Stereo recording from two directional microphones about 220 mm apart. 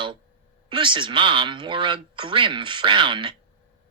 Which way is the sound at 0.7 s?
20° right (ahead or behind).